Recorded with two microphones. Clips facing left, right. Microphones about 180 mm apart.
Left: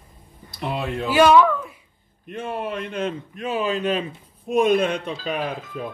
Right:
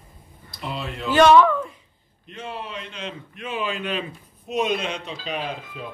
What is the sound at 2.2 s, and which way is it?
A man's voice, 55° left (ahead or behind).